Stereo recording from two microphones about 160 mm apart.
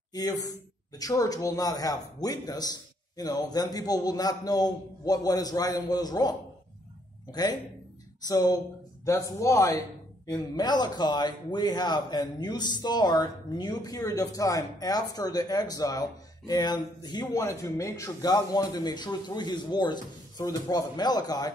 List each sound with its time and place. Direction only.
0.1 s a man's voice: 25° left (ahead or behind)